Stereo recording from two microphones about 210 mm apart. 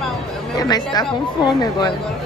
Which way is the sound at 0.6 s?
20° left (ahead or behind).